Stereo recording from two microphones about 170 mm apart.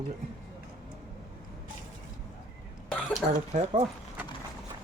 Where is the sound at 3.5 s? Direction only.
40° right (ahead or behind).